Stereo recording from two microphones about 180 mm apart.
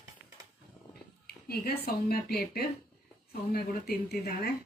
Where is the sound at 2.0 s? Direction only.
60° left (ahead or behind).